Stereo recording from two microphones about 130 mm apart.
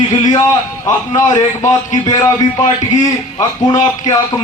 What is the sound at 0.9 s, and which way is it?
A man's voice, 30° left (ahead or behind).